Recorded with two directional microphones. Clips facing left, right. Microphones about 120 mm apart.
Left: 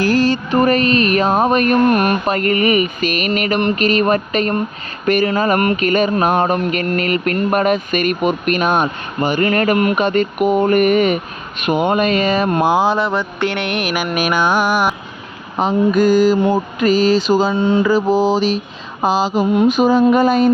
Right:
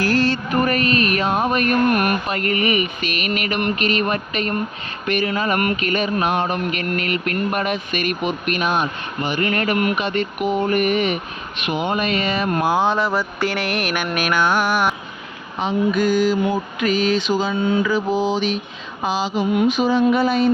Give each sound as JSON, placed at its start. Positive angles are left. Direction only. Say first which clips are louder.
{"t": 0.0, "sound": "music", "louder": "left 4 dB", "side_deg": 15}
{"t": 0.5, "sound": "mantra", "louder": "left 6 dB", "side_deg": 35}
{"t": 2.2, "sound": "mantra", "louder": "left 5 dB", "side_deg": 40}
{"t": 12.5, "sound": "a sound", "louder": "left 4 dB", "side_deg": 25}
{"t": 12.7, "sound": "mantra", "louder": "left 3 dB", "side_deg": 5}
{"t": 15.5, "sound": "mantra", "louder": "left 5 dB", "side_deg": 45}